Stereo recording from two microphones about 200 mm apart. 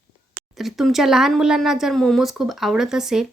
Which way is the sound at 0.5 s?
Centre (ahead or behind).